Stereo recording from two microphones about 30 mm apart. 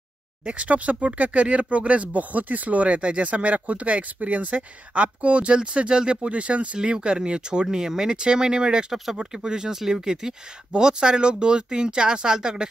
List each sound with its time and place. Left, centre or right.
0.5 s speech: right
2.3 s speech: right
5.6 s speech: right
6.8 s speech: right
8.9 s speech: centre
9.2 s speech: right